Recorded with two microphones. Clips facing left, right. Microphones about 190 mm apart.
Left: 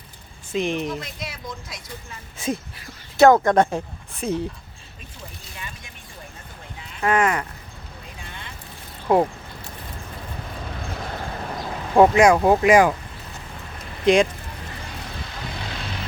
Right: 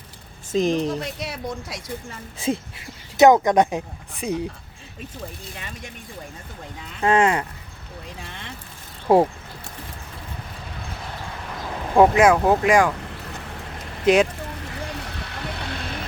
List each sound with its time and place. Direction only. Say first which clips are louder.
0.5 s speech: right 4 dB; 40° right (ahead or behind)
1.0 s speech: right 5 dB; 70° right (ahead or behind)
2.4 s speech: right 2 dB; 25° right (ahead or behind)
7.0 s speech: right 2 dB; 30° right (ahead or behind)
9.1 s speech: right 2 dB; 30° right (ahead or behind)
11.9 s speech: left 1 dB; 5° right (ahead or behind)
14.0 s speech: even; 5° right (ahead or behind)
15.3 s vehicle: right 3 dB; 65° right (ahead or behind)